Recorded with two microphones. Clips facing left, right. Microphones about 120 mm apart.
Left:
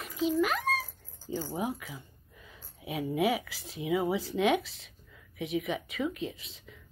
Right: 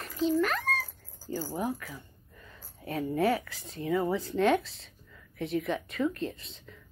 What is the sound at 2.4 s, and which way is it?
Speech, 10° left (ahead or behind).